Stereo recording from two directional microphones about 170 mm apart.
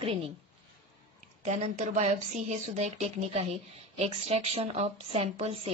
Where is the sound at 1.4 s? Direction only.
40° right (ahead or behind).